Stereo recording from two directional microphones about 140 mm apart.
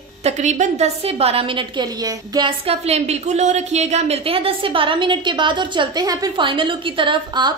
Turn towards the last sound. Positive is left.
turn(degrees=-35)  # may be behind; listen again after turning